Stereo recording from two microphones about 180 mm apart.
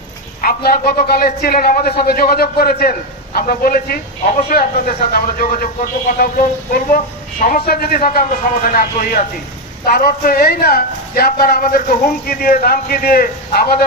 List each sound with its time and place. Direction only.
0.4 s a man's voice: 55° left (ahead or behind)